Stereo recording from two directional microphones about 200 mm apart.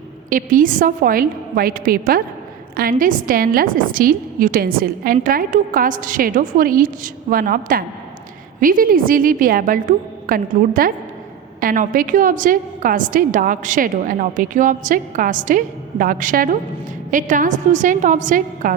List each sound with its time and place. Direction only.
0.3 s a woman's voice: 45° right (ahead or behind)